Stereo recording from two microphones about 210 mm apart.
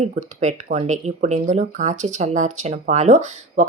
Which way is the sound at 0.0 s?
35° right (ahead or behind).